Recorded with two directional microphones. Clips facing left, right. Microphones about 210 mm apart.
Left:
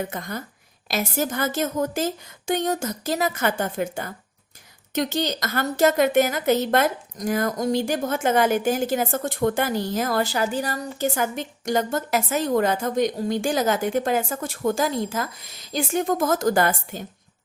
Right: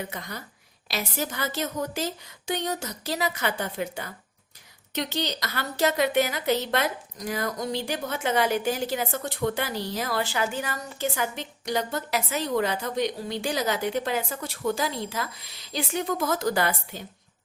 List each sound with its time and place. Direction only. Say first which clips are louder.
0.0 s a woman's voice: left 6 dB; 50° left (ahead or behind)